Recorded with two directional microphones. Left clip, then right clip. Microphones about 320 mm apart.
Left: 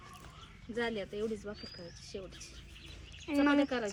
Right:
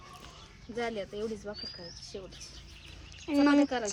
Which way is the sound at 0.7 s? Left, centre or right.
Centre.